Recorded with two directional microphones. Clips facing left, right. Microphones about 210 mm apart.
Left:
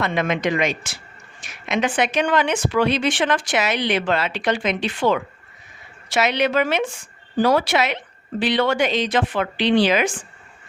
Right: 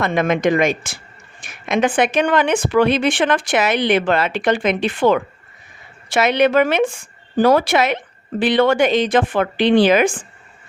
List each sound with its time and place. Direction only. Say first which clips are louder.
0.0 s speech: right 5 dB; 50° right (ahead or behind)